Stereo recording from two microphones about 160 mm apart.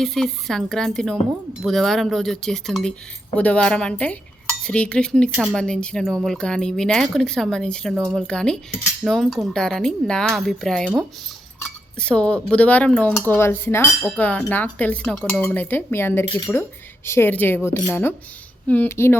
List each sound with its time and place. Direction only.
0.0 s speech: centre (ahead or behind)